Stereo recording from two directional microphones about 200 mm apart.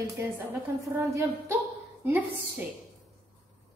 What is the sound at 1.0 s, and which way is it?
A woman's voice, 15° right (ahead or behind).